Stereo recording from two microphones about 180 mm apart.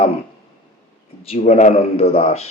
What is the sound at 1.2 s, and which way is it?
A man's voice, 35° left (ahead or behind).